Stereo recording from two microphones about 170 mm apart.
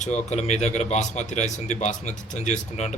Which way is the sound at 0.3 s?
40° left (ahead or behind).